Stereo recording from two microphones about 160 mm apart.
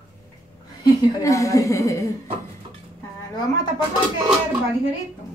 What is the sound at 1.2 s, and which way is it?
Speech, 20° left (ahead or behind).